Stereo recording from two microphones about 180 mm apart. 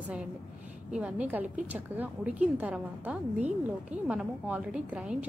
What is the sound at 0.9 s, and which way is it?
A woman's voice, 5° right (ahead or behind).